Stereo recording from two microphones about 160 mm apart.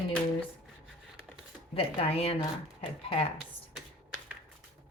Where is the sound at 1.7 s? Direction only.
35° left (ahead or behind).